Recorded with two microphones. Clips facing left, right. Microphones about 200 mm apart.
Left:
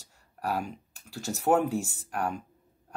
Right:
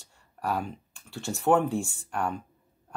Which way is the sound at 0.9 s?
40° left (ahead or behind).